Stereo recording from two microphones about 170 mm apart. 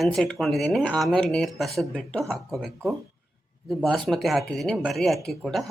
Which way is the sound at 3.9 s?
Centre (ahead or behind).